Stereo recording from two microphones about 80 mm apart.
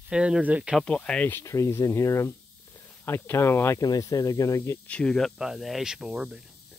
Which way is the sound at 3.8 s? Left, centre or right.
Left.